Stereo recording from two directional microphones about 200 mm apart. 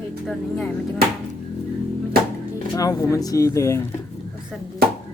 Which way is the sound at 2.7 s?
15° left (ahead or behind).